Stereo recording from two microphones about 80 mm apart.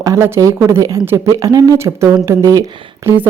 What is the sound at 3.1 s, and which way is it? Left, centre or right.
Speech, right.